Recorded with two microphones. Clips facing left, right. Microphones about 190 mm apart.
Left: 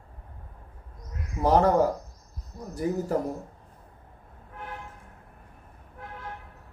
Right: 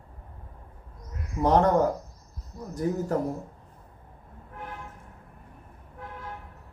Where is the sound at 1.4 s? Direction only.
5° left (ahead or behind).